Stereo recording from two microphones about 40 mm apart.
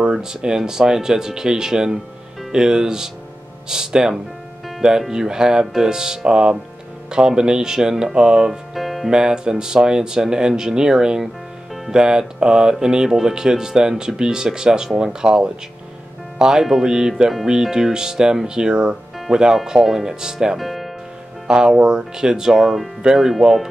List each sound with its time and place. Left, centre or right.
0.0 s speech: centre
8.7 s music: centre
9.1 s speech: centre
20.5 s music: centre
21.5 s speech: centre